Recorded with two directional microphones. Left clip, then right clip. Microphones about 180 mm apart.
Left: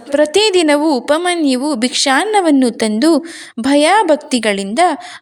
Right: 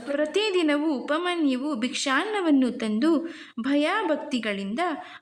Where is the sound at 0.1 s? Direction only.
40° left (ahead or behind).